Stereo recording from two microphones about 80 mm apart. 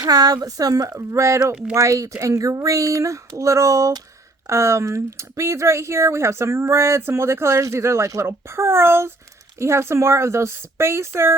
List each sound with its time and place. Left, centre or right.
0.0 s speech: right